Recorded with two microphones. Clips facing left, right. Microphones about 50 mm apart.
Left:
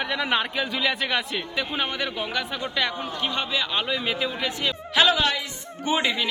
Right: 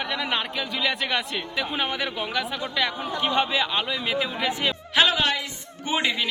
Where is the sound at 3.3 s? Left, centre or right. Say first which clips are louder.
Right 5 dB; centre.